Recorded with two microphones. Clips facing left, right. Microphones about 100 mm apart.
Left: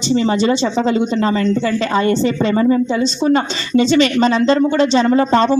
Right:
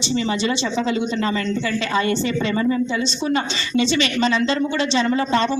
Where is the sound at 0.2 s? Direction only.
40° left (ahead or behind).